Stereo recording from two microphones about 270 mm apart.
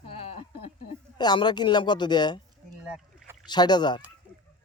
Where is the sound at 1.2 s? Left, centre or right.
Centre.